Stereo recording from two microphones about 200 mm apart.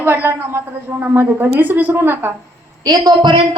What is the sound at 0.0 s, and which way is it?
A woman's voice, 10° right (ahead or behind).